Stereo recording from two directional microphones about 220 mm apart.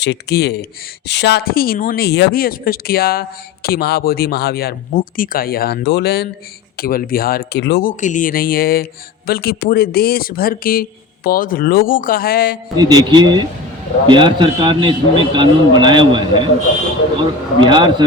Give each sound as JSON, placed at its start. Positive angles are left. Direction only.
{"t": 0.0, "sound": "speech", "side_deg": 50}
{"t": 12.7, "sound": "a man's voice", "side_deg": -20}
{"t": 17.6, "sound": "a man's voice", "side_deg": -20}